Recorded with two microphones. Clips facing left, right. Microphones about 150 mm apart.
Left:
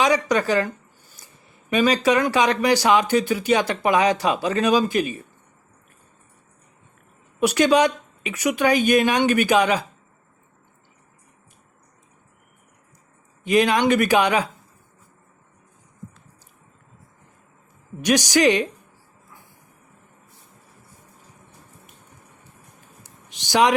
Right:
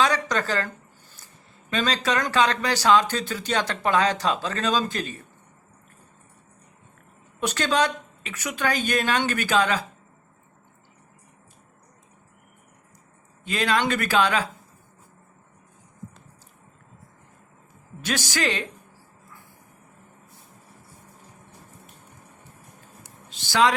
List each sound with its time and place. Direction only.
0.0 s speech: 10° left (ahead or behind)
1.7 s speech: 10° left (ahead or behind)
7.3 s speech: 15° left (ahead or behind)
13.4 s speech: 15° left (ahead or behind)
18.0 s speech: 15° left (ahead or behind)
23.3 s speech: 15° left (ahead or behind)